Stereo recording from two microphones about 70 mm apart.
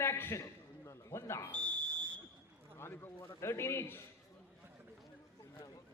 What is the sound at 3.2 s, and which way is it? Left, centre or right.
Speech, left.